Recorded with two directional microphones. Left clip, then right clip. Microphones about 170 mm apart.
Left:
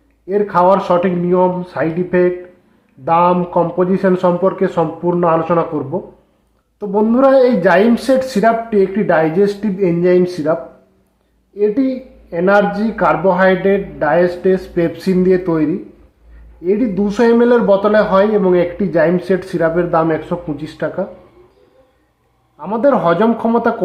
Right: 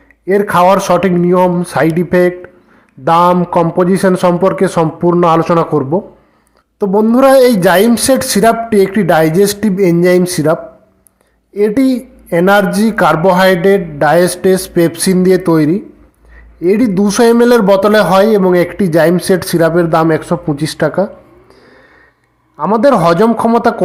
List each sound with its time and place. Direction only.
0.3 s speech: 40° right (ahead or behind)
5.2 s a man's voice: 50° right (ahead or behind)
22.5 s speech: 40° right (ahead or behind)